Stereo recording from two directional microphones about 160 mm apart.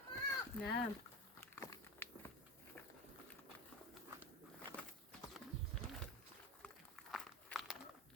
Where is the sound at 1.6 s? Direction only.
20° left (ahead or behind).